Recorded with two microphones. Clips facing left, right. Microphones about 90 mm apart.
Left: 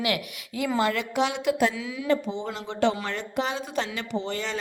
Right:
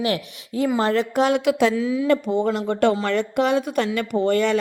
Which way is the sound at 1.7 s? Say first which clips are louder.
Right 11 dB; 35° right (ahead or behind).